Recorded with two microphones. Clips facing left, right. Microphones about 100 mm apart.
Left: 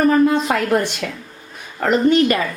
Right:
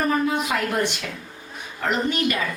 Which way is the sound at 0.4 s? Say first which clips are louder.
Left 7 dB; 45° left (ahead or behind).